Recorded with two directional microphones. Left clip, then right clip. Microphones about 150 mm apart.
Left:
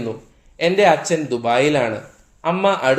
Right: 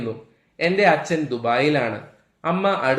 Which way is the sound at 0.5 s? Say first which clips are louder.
Left 3 dB; 30° left (ahead or behind).